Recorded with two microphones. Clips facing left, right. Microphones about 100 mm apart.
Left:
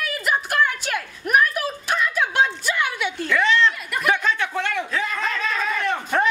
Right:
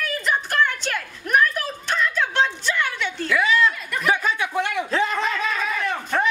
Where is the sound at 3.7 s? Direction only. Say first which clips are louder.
Left 1 dB; 5° left (ahead or behind).